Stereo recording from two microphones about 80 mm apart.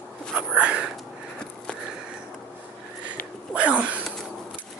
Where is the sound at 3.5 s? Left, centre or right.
Centre.